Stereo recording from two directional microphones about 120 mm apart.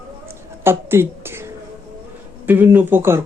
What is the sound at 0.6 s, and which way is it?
A woman's voice, 20° right (ahead or behind).